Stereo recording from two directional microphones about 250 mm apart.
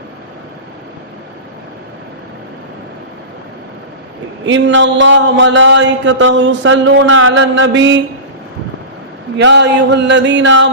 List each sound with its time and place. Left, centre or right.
4.4 s speech: right
9.4 s speech: right